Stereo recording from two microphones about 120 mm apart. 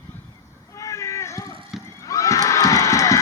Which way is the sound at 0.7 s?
25° left (ahead or behind).